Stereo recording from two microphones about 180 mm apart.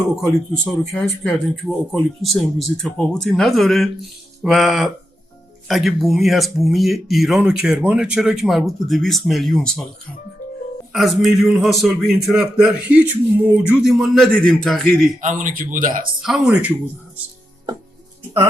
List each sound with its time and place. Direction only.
0.2 s speech: centre (ahead or behind)
10.9 s speech: centre (ahead or behind)
15.2 s speech: 45° right (ahead or behind)
16.2 s speech: 5° right (ahead or behind)